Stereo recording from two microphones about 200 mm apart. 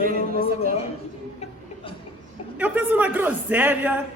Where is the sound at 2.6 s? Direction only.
10° right (ahead or behind).